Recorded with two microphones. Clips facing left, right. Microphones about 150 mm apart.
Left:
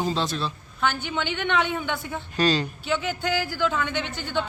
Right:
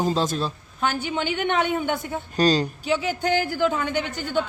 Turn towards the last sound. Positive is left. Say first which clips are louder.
# right 3 dB
turn(degrees=-40)  # may be behind; listen again after turning